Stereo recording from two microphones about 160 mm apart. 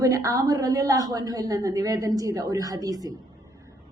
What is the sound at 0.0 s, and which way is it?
Speech, 20° right (ahead or behind).